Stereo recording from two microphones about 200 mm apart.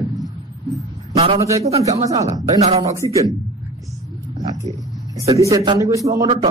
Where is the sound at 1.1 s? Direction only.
30° right (ahead or behind).